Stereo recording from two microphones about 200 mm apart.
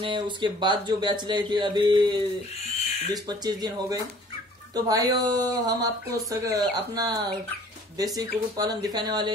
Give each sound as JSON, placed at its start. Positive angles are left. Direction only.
{"t": 0.0, "sound": "speech", "side_deg": -25}